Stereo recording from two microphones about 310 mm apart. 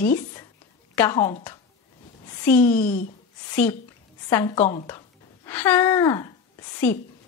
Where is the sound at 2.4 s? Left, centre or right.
Centre.